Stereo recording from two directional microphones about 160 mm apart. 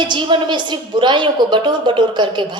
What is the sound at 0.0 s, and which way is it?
A woman's voice, 30° right (ahead or behind).